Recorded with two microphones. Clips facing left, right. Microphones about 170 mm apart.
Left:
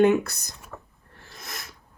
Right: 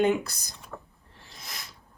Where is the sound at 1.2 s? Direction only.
60° left (ahead or behind).